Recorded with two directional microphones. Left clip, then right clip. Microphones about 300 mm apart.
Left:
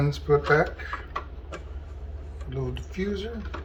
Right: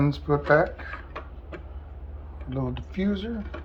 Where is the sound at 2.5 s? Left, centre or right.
Centre.